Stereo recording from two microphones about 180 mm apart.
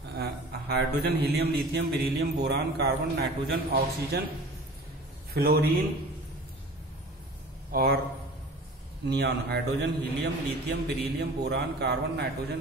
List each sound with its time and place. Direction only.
0.1 s a man's voice: 60° right (ahead or behind)
5.3 s speech: 55° right (ahead or behind)
7.7 s a man's voice: 60° right (ahead or behind)
9.1 s a man's voice: 65° right (ahead or behind)